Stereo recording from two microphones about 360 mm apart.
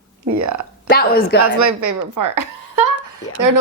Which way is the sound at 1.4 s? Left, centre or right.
Right.